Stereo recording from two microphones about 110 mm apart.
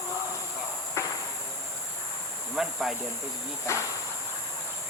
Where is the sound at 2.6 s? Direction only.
5° right (ahead or behind).